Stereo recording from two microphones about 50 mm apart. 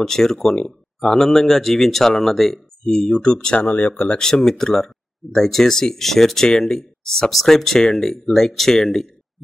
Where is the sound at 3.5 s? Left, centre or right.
Left.